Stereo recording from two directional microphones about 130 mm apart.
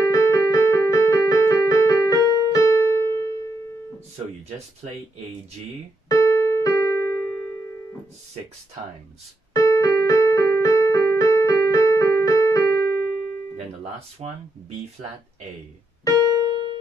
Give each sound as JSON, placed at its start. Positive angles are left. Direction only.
{"t": 0.1, "sound": "keyboard", "side_deg": 25}
{"t": 6.0, "sound": "keyboard", "side_deg": 25}
{"t": 9.5, "sound": "keyboard", "side_deg": 25}
{"t": 14.2, "sound": "speech", "side_deg": -45}
{"t": 16.3, "sound": "keyboard", "side_deg": -30}